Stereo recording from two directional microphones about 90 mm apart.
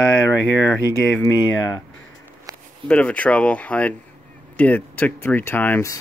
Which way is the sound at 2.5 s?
40° right (ahead or behind).